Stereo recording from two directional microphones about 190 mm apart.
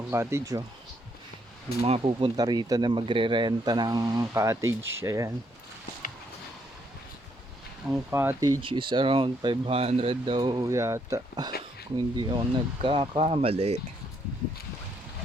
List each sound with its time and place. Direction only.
0.1 s speech: 15° right (ahead or behind)
1.8 s speech: 30° right (ahead or behind)
7.9 s speech: 10° right (ahead or behind); by 13.7 s 35° right (ahead or behind)